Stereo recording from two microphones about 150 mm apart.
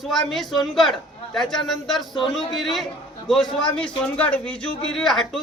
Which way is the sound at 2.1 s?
30° left (ahead or behind).